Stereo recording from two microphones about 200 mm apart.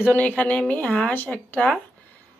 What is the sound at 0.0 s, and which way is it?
Speech, 10° left (ahead or behind).